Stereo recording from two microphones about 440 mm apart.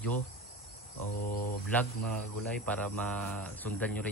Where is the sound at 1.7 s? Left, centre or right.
Centre.